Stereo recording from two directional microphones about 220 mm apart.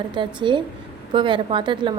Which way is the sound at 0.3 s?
20° right (ahead or behind).